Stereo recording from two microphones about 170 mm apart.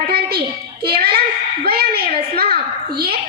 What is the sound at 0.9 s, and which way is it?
Speech, 65° right (ahead or behind).